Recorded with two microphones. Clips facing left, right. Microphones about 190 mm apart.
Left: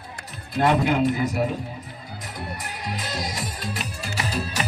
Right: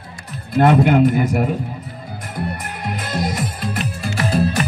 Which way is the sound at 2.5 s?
55° right (ahead or behind).